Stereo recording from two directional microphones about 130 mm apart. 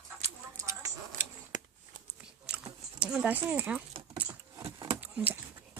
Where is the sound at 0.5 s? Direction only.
25° right (ahead or behind).